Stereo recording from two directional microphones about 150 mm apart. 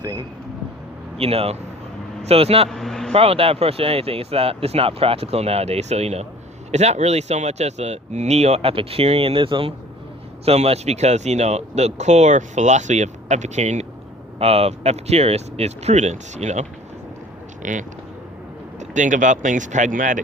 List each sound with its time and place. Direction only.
0.0 s speech: 25° right (ahead or behind)
1.2 s speech: 40° right (ahead or behind)
2.6 s vehicle: 5° left (ahead or behind)
3.1 s speech: 40° right (ahead or behind); by 20.2 s 60° right (ahead or behind)